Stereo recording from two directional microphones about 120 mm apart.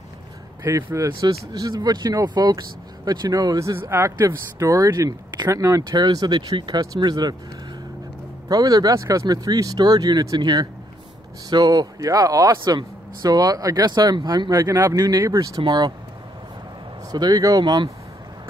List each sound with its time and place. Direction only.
0.7 s speech: 25° right (ahead or behind)
8.5 s speech: 30° right (ahead or behind)
17.1 s speech: 35° right (ahead or behind)